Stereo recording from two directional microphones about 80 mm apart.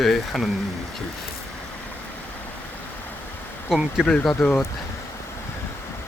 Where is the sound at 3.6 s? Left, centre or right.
Centre.